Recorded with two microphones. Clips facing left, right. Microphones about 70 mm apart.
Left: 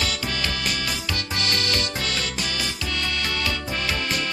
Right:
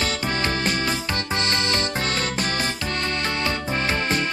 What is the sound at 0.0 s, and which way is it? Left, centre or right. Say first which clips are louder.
Music: right 3 dB; right.